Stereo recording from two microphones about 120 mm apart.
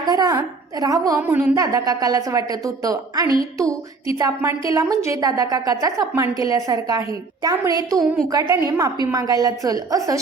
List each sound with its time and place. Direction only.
0.0 s a woman's voice: 35° right (ahead or behind)